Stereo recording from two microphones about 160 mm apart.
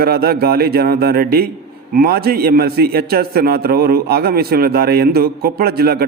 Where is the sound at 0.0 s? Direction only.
75° right (ahead or behind).